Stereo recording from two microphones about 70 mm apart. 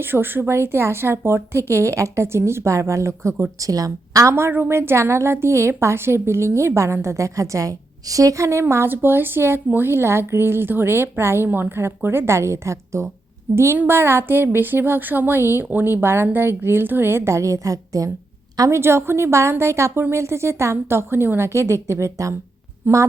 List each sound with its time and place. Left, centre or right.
0.0 s a woman's voice: right
3.6 s a woman's voice: right
8.6 s a woman's voice: right
13.7 s a woman's voice: right
18.7 s a woman's voice: right
22.8 s a woman's voice: right